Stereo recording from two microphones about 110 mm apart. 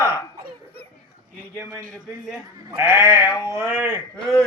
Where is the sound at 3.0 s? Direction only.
20° right (ahead or behind).